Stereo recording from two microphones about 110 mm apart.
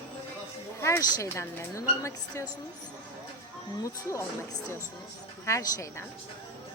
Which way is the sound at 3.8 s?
25° left (ahead or behind).